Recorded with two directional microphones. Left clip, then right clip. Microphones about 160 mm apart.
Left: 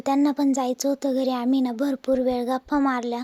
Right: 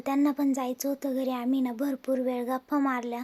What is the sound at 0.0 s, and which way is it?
A child's voice, 25° left (ahead or behind).